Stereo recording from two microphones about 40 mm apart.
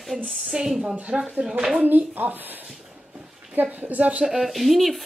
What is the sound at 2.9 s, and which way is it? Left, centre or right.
Dog, right.